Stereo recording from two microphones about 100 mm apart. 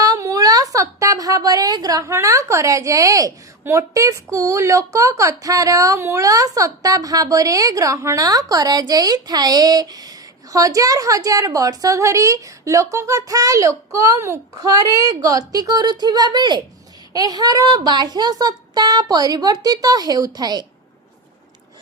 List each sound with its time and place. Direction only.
0.0 s a woman's voice: 35° right (ahead or behind)